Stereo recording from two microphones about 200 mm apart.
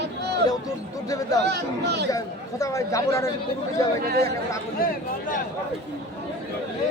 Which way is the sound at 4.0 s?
50° right (ahead or behind).